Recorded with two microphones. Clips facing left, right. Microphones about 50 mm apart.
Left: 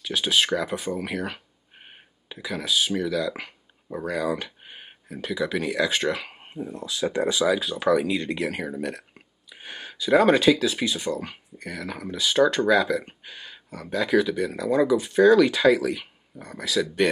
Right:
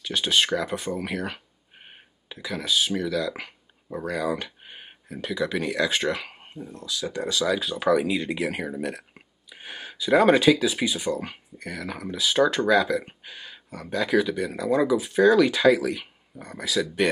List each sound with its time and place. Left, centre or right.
0.0 s speech: centre
6.4 s speech: centre
7.4 s speech: centre